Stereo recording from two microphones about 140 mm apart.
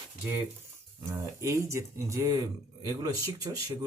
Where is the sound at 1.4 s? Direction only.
20° right (ahead or behind).